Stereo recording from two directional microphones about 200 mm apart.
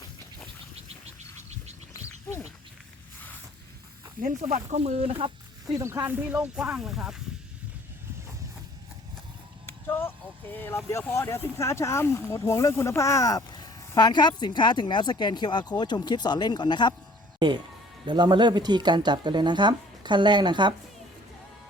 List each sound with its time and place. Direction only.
1.0 s a sound: 35° right (ahead or behind)
1.9 s a sound: 15° left (ahead or behind)
4.2 s speech: 40° right (ahead or behind)
5.7 s speech: 15° right (ahead or behind)
9.6 s speech: 10° left (ahead or behind)
18.0 s speech: 20° right (ahead or behind)